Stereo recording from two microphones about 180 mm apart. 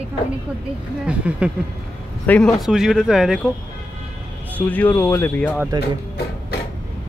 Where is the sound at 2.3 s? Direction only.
5° left (ahead or behind).